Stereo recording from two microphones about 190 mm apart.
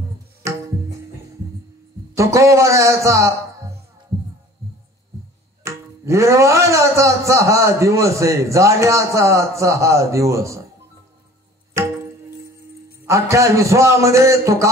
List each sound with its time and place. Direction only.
0.4 s tabla: 15° right (ahead or behind)
2.1 s speech: 15° right (ahead or behind)
5.6 s speech: 15° right (ahead or behind)
11.7 s tabla: 15° right (ahead or behind)
13.0 s speech: 15° right (ahead or behind)